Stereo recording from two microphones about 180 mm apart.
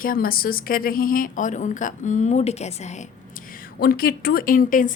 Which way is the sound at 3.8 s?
55° left (ahead or behind).